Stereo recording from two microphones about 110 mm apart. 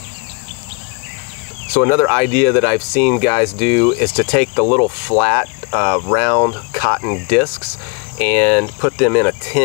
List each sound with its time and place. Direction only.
1.7 s speech: 25° left (ahead or behind)